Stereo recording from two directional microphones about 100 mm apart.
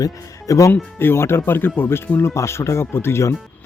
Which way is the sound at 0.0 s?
35° left (ahead or behind).